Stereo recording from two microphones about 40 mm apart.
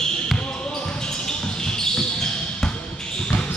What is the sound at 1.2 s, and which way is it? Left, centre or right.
Basketball bounce, centre.